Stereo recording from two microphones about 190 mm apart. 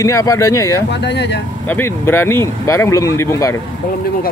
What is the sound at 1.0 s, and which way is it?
Speech, 65° left (ahead or behind).